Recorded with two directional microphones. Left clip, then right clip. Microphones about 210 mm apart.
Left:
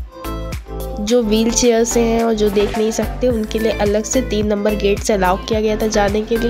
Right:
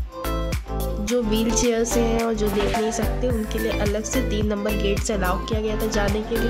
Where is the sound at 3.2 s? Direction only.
25° left (ahead or behind).